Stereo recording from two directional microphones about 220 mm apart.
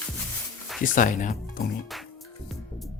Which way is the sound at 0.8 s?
35° left (ahead or behind).